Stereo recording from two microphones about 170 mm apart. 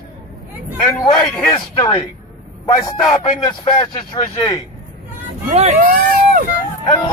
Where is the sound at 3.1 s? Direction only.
30° left (ahead or behind).